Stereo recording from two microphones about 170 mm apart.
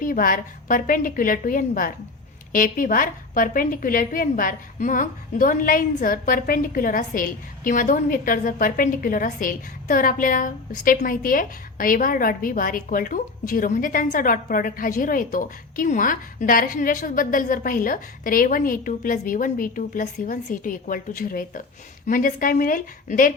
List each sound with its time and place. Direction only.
0.0 s a woman's voice: 55° left (ahead or behind)